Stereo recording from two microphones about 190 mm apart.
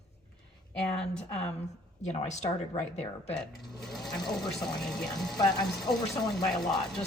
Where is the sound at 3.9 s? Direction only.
Centre (ahead or behind).